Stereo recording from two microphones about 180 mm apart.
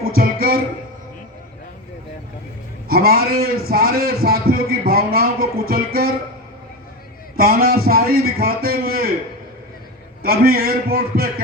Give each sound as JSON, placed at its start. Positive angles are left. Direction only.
{"t": 0.0, "sound": "music", "side_deg": -55}
{"t": 2.9, "sound": "a man's voice", "side_deg": -60}
{"t": 7.3, "sound": "a man's voice", "side_deg": -55}
{"t": 10.2, "sound": "a man's voice", "side_deg": -55}